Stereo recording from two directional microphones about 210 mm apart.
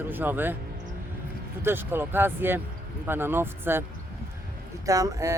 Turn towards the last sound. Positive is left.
turn(degrees=-15)  # may be behind; listen again after turning